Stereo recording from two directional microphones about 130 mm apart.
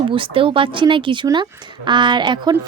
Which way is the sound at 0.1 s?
40° right (ahead or behind).